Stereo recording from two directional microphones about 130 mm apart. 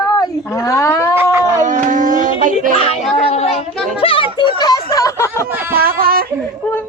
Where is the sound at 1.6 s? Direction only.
70° right (ahead or behind).